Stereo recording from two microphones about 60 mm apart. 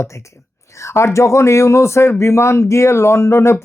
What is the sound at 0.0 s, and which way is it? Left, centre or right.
Speech, left.